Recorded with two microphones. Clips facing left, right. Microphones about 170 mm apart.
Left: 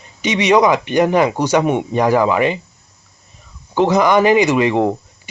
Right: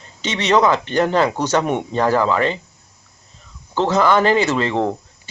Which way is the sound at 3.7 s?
15° left (ahead or behind).